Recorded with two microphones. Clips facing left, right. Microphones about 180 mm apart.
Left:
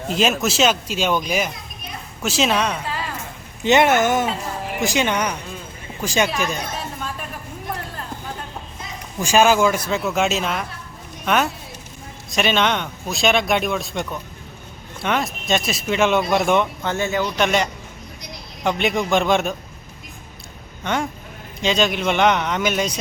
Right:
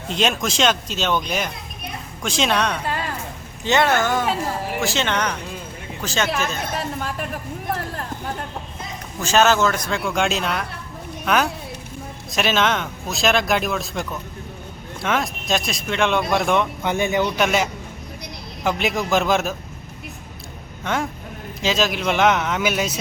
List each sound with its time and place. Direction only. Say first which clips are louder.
0.1 s speech: left 2 dB; 5° left (ahead or behind)
3.6 s speech: left 3 dB; 20° left (ahead or behind)
9.2 s speech: left 2 dB; 10° left (ahead or behind)
16.8 s speech: right 2 dB; 15° right (ahead or behind)
17.3 s speech: even; 5° right (ahead or behind)
20.8 s speech: left 1 dB; centre (ahead or behind)